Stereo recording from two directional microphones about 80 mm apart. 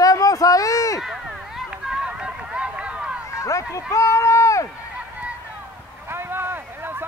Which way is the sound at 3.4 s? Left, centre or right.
Left.